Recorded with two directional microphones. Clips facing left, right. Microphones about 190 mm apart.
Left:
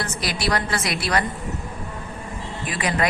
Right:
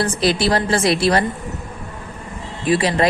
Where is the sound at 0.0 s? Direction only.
25° right (ahead or behind).